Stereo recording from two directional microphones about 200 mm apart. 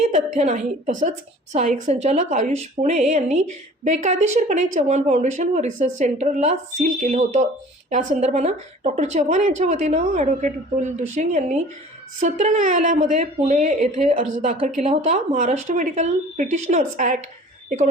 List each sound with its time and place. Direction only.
0.0 s a woman's voice: 35° right (ahead or behind)